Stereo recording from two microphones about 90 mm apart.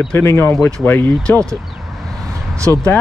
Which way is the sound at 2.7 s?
35° left (ahead or behind).